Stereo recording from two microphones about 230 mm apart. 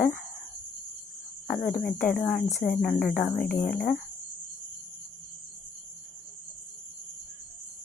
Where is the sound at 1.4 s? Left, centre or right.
Centre.